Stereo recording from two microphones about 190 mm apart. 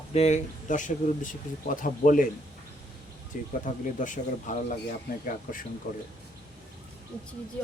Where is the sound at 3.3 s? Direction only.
45° left (ahead or behind).